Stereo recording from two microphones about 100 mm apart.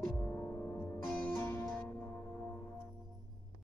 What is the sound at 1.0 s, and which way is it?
Music, 20° left (ahead or behind).